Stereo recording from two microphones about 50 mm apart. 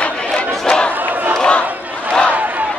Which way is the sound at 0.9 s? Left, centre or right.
Right.